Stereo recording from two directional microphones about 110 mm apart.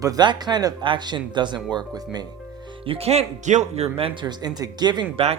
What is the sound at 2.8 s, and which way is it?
Speech, 60° right (ahead or behind).